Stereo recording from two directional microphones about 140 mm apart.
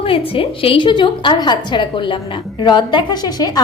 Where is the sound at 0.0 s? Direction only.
40° left (ahead or behind).